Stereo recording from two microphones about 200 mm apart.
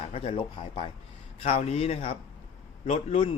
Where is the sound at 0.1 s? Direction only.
30° left (ahead or behind).